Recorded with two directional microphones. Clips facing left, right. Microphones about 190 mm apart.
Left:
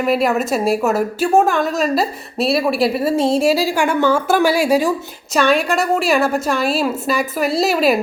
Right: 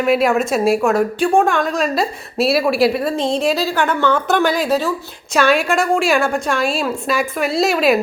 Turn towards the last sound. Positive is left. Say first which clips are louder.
# even
turn(degrees=0)  # may be behind; listen again after turning